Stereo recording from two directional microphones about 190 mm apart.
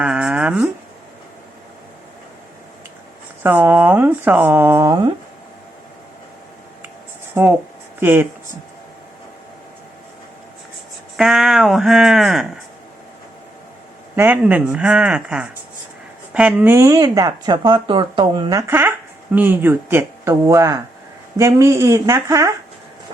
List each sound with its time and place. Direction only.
0.0 s a sound: 5° right (ahead or behind)
3.4 s speech: 10° right (ahead or behind)
7.3 s speech: 10° right (ahead or behind)
11.2 s speech: centre (ahead or behind)
14.2 s speech: 10° right (ahead or behind)
18.7 s speech: 10° right (ahead or behind)